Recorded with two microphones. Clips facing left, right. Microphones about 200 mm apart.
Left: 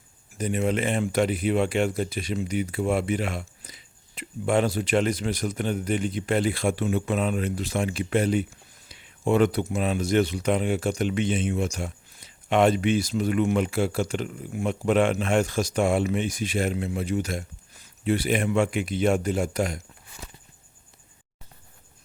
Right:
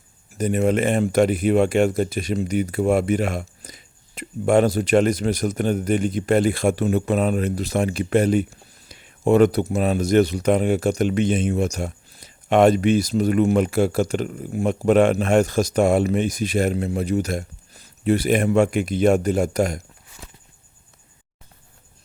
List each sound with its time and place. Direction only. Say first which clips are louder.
0.3 s speech: right 6 dB; 45° right (ahead or behind)